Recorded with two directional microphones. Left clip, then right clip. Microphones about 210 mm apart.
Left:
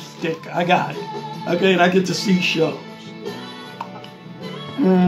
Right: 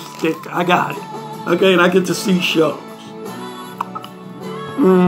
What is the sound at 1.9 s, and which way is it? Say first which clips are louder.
Speech: right 3 dB; 5° right (ahead or behind).